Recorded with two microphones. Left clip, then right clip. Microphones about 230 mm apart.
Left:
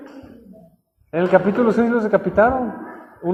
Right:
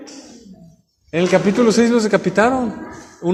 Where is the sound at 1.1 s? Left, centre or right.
Right.